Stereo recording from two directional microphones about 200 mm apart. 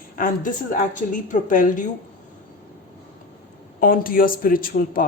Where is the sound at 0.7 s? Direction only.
40° left (ahead or behind).